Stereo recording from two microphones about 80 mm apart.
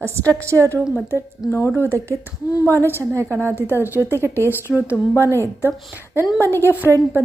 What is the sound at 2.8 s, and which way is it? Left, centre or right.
Speech, right.